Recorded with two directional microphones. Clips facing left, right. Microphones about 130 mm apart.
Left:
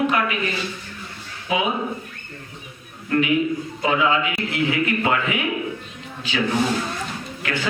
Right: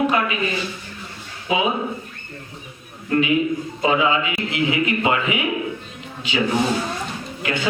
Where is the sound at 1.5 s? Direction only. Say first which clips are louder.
Right 2 dB; 25° right (ahead or behind).